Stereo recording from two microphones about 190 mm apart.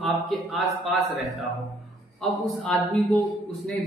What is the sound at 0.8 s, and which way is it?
Speech, centre (ahead or behind).